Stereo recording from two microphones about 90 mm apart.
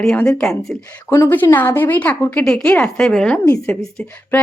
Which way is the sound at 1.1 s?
25° left (ahead or behind).